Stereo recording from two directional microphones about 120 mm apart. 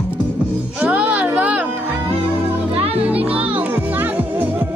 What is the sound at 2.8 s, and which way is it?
Music, 55° right (ahead or behind).